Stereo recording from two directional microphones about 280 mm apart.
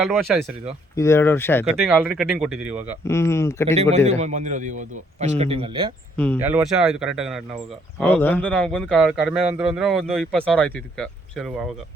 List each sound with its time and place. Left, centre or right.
0.3 s speech: centre
0.9 s speech: centre
1.6 s speech: centre
3.0 s speech: centre
3.8 s a man's voice: right
6.1 s speech: centre